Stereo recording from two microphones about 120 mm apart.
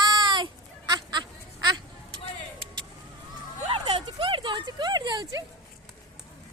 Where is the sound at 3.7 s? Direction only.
50° right (ahead or behind).